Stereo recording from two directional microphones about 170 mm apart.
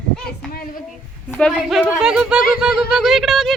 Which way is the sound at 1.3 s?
Centre (ahead or behind).